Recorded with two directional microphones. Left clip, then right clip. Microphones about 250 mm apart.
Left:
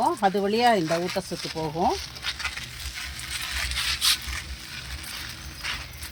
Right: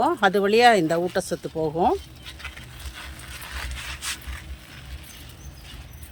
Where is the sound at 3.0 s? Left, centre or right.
Right.